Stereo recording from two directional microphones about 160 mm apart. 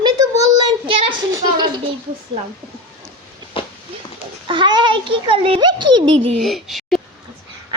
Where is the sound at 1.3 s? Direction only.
30° right (ahead or behind).